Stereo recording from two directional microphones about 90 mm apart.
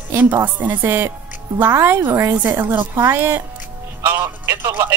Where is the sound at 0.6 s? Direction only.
20° right (ahead or behind).